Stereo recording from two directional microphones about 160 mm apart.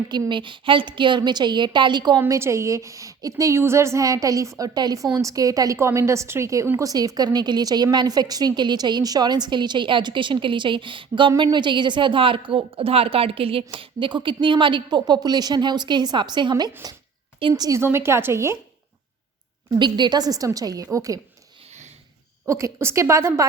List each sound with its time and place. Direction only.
0.1 s a woman's voice: 30° right (ahead or behind)
2.2 s a woman's voice: 15° right (ahead or behind)
19.8 s a woman's voice: 30° right (ahead or behind)
22.4 s a woman's voice: 20° right (ahead or behind)